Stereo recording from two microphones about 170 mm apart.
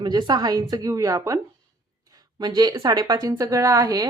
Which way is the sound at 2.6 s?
25° right (ahead or behind).